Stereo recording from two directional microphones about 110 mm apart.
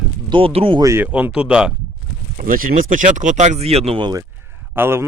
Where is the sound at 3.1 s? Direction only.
90° right; by 4.0 s 65° right (ahead or behind).